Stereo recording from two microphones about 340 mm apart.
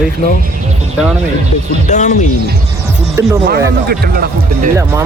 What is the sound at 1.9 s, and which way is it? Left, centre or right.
Speech, left.